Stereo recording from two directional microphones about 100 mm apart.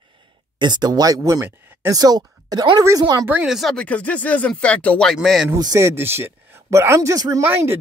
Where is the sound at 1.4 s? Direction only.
20° right (ahead or behind).